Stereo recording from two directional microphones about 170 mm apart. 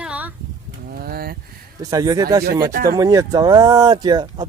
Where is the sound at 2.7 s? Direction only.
60° right (ahead or behind).